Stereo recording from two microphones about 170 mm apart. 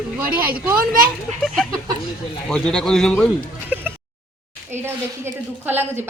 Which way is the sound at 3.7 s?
10° right (ahead or behind).